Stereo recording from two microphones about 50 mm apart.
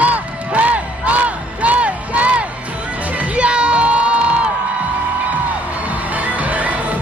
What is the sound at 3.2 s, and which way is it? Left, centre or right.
Crowd, right.